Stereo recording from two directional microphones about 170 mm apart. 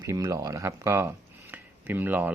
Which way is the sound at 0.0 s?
20° right (ahead or behind).